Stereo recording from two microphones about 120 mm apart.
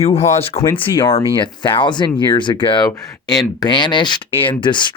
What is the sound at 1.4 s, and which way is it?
Speech, 40° left (ahead or behind).